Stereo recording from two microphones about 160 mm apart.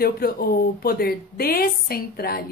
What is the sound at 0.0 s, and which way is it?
Speech, 70° left (ahead or behind).